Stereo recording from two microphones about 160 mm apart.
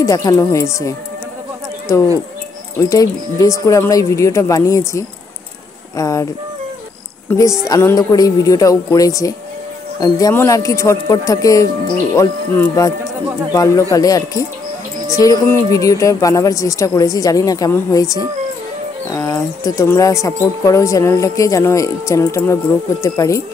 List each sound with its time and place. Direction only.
0.0 s speech: 20° left (ahead or behind)
2.8 s speech: 20° left (ahead or behind)
7.2 s a woman's voice: 20° left (ahead or behind)